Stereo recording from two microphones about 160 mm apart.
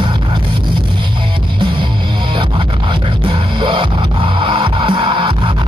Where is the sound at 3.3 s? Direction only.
30° right (ahead or behind).